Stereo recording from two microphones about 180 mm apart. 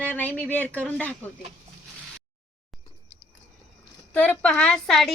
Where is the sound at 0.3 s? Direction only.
10° left (ahead or behind).